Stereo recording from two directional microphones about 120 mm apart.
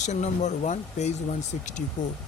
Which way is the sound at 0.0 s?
75° left (ahead or behind).